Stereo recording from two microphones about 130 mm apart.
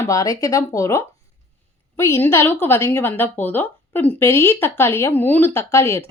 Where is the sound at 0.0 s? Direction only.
25° left (ahead or behind).